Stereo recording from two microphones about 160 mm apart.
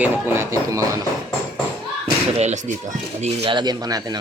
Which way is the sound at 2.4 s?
50° right (ahead or behind).